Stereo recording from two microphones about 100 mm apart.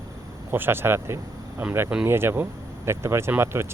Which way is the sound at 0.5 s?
20° right (ahead or behind).